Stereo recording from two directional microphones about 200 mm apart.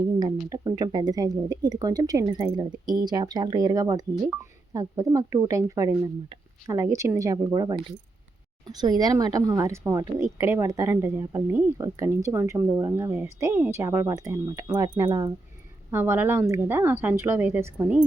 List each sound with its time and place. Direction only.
0.5 s a woman's voice: 20° right (ahead or behind)
4.1 s speech: 5° right (ahead or behind)
4.7 s speech: 15° right (ahead or behind)